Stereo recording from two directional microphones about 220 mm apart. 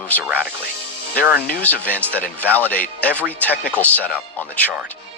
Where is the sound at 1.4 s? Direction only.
45° left (ahead or behind).